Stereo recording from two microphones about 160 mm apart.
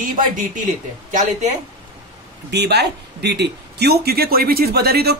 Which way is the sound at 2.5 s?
90° right.